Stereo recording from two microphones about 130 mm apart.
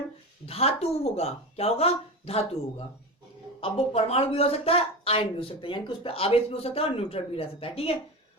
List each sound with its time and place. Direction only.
0.4 s speech: 50° left (ahead or behind)